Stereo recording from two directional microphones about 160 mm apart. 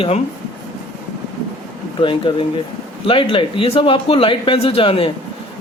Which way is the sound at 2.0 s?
35° left (ahead or behind).